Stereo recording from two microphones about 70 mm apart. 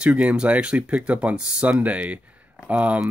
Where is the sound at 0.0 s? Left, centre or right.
Centre.